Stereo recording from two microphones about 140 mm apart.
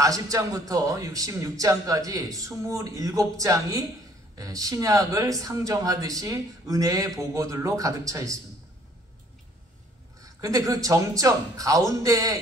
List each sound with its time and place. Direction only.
0.0 s speech: 25° right (ahead or behind)
10.2 s speech: 25° right (ahead or behind)